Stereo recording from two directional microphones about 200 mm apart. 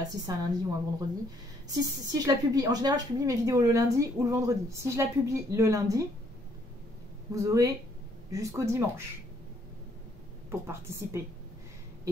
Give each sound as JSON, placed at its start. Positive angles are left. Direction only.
{"t": 0.1, "sound": "speech", "side_deg": -20}
{"t": 7.3, "sound": "speech", "side_deg": -15}
{"t": 10.5, "sound": "speech", "side_deg": -15}